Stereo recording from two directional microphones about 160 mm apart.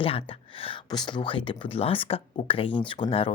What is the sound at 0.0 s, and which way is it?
Speech, 35° left (ahead or behind).